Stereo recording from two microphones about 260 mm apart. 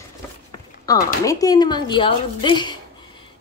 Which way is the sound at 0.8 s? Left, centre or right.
Centre.